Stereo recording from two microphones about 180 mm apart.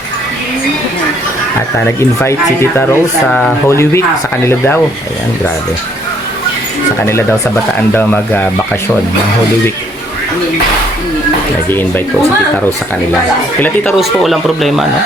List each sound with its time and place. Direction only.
2.0 s speech: 15° left (ahead or behind)
3.2 s speech: 5° left (ahead or behind)
3.7 s speech: 15° left (ahead or behind)
7.0 s speech: 15° left (ahead or behind)
11.7 s speech: 10° left (ahead or behind)
13.9 s speech: centre (ahead or behind)